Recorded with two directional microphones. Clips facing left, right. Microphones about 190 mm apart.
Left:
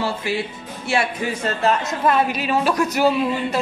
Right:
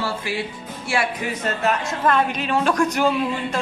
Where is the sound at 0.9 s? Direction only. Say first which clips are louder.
Left 2 dB; 25° left (ahead or behind).